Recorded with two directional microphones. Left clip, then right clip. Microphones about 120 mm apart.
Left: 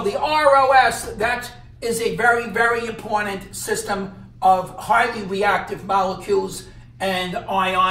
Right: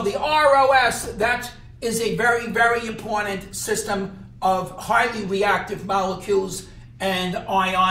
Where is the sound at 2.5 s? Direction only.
Centre (ahead or behind).